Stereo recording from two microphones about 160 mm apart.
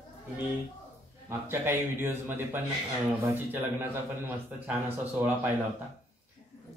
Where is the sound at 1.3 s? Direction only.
15° right (ahead or behind).